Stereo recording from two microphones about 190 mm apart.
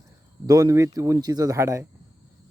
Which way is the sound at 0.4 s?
15° right (ahead or behind).